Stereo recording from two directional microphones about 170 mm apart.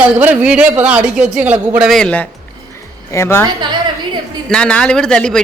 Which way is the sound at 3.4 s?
25° right (ahead or behind).